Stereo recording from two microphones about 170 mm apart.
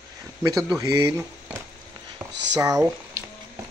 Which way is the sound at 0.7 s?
20° right (ahead or behind).